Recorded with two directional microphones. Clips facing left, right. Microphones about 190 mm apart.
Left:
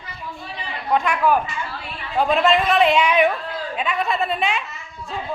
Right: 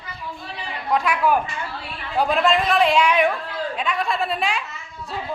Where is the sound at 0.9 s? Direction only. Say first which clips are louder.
Left 1 dB; 5° right (ahead or behind).